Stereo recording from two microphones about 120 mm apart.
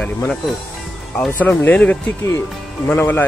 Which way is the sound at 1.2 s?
15° left (ahead or behind).